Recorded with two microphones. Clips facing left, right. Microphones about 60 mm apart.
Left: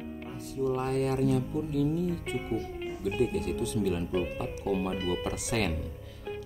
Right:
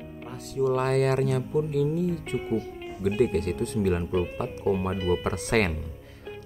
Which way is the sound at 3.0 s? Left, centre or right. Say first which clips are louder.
Right 5 dB; right.